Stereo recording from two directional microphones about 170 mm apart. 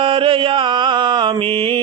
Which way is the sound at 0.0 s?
30° right (ahead or behind).